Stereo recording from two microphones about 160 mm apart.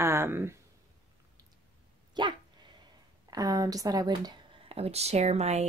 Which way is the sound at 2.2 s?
25° right (ahead or behind).